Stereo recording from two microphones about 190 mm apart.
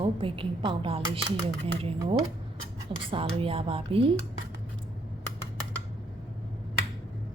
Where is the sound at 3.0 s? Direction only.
30° right (ahead or behind).